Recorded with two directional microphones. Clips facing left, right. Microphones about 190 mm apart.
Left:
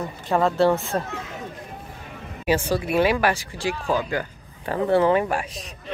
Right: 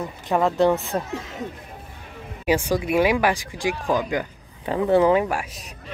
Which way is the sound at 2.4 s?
15° right (ahead or behind).